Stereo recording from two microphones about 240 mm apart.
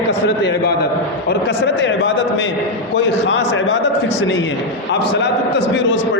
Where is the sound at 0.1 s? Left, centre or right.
Left.